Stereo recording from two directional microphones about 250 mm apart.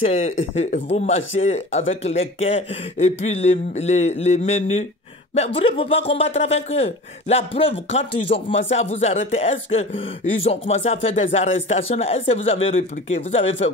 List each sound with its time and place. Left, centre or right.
0.0 s speech: left